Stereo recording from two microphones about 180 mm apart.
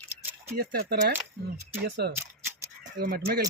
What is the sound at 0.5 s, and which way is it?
Speech, 60° right (ahead or behind).